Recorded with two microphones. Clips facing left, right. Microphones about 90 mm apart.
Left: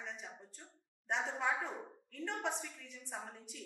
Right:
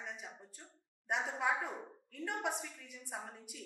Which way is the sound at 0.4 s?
5° right (ahead or behind).